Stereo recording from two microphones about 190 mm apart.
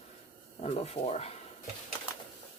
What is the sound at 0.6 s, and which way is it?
Speech, 35° left (ahead or behind).